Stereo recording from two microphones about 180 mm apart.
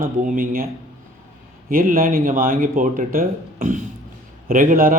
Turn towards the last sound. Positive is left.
turn(degrees=-50)  # may be behind; listen again after turning